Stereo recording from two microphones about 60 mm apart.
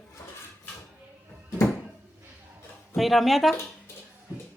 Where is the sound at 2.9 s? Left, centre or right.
Centre.